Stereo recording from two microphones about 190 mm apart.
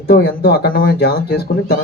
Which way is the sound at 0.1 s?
60° left (ahead or behind).